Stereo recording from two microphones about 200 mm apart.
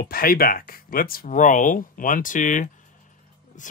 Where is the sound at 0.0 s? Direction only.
50° left (ahead or behind).